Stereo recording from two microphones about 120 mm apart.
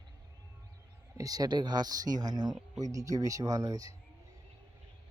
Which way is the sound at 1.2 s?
30° right (ahead or behind).